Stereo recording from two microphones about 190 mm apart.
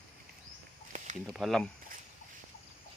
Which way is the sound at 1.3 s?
Centre (ahead or behind).